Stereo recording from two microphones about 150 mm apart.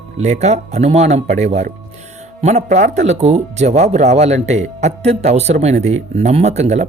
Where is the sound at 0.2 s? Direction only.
50° right (ahead or behind).